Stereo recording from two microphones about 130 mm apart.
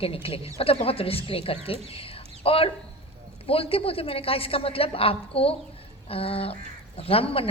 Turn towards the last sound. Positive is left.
turn(degrees=45)  # may be behind; listen again after turning